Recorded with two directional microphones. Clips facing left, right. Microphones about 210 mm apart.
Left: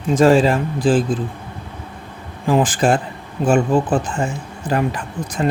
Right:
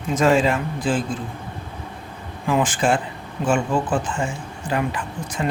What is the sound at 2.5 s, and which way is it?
Speech, 35° left (ahead or behind).